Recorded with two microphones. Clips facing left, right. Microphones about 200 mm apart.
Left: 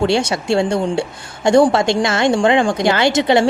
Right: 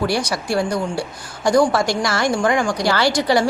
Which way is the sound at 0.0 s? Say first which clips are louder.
Left 4 dB; 25° left (ahead or behind).